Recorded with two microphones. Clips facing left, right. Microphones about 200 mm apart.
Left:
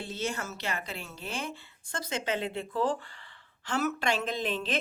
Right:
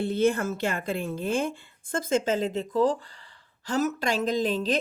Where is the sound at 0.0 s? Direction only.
55° right (ahead or behind).